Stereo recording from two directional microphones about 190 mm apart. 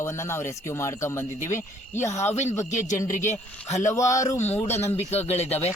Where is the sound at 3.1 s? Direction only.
40° left (ahead or behind).